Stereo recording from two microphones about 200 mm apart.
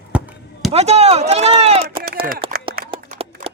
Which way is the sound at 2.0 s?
45° right (ahead or behind).